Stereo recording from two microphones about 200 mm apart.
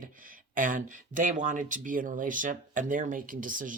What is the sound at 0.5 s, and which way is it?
Speech, 45° right (ahead or behind).